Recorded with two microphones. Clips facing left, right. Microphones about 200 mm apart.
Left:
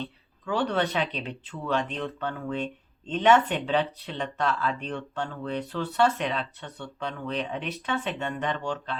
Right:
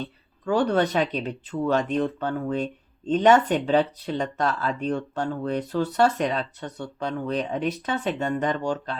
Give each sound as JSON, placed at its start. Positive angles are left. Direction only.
{"t": 0.0, "sound": "speech", "side_deg": -40}